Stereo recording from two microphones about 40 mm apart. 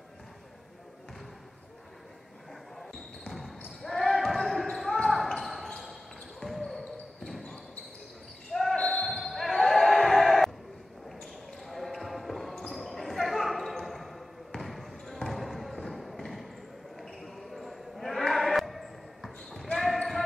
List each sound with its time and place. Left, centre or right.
3.3 s basketball bounce: centre
8.5 s basketball bounce: centre
8.7 s basketball bounce: centre
9.0 s basketball bounce: centre